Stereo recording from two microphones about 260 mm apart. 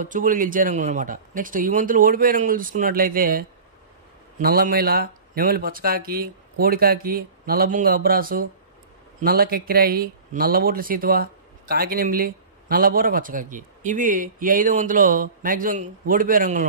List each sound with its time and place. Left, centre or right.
0.0 s speech: right